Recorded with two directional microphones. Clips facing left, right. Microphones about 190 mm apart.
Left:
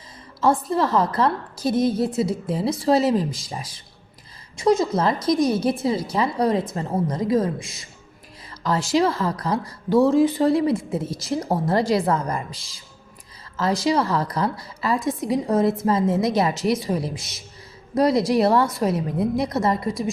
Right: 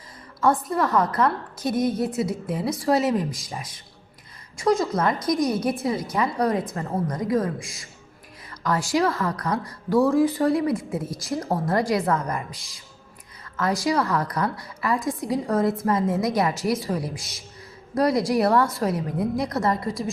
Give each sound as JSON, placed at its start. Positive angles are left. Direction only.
{"t": 0.7, "sound": "a woman's voice", "side_deg": 30}